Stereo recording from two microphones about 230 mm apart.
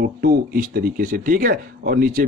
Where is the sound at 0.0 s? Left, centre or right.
Right.